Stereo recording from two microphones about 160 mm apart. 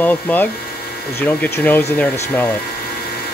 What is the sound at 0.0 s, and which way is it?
Speech, 10° left (ahead or behind).